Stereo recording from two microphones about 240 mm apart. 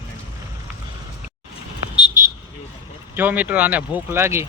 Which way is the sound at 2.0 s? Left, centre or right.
Centre.